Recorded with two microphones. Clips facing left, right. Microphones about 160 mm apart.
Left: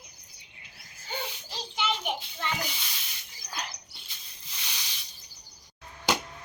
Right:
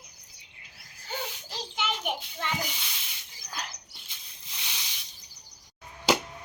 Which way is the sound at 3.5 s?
Centre (ahead or behind).